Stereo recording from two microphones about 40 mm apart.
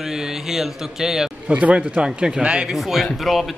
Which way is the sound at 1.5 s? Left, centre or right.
Right.